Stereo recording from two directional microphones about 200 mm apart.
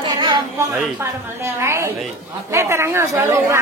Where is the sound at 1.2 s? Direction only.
15° right (ahead or behind).